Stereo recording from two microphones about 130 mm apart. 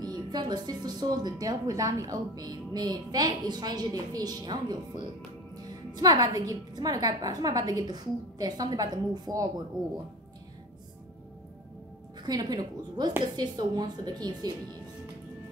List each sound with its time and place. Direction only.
0.0 s speech: 30° right (ahead or behind)
12.2 s speech: 30° right (ahead or behind)